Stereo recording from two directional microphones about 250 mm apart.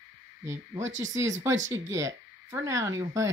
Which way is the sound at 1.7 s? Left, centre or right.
Centre.